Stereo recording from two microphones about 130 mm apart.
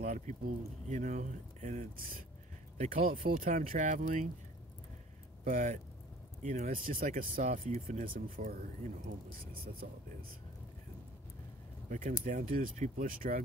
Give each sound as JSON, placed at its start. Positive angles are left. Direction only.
{"t": 0.0, "sound": "speech", "side_deg": -75}
{"t": 5.4, "sound": "speech", "side_deg": -85}
{"t": 7.5, "sound": "speech", "side_deg": -80}
{"t": 12.3, "sound": "speech", "side_deg": -85}